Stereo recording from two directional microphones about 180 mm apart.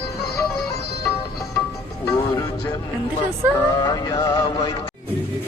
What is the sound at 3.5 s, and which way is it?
Music, 20° left (ahead or behind).